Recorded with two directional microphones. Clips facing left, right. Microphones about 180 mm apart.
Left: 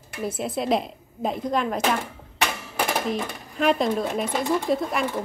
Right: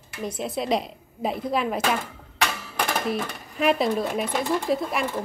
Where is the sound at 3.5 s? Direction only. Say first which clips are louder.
Even; 5° right (ahead or behind).